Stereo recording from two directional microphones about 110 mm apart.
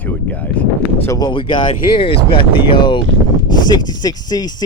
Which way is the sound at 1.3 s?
45° left (ahead or behind).